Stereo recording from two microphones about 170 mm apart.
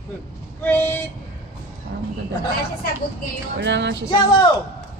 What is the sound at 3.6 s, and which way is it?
Speech, 90° right.